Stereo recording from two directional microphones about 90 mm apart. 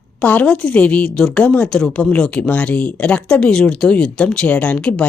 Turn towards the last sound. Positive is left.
turn(degrees=15)  # may be behind; listen again after turning